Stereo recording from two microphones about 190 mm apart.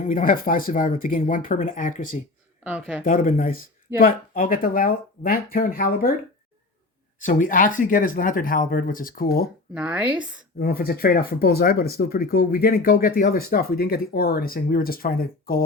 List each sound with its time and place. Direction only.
0.0 s speech: 45° left (ahead or behind)
2.6 s speech: 5° right (ahead or behind)
3.0 s speech: 45° left (ahead or behind)
7.2 s speech: 45° left (ahead or behind)
9.7 s speech: 5° right (ahead or behind)
10.6 s speech: 55° left (ahead or behind)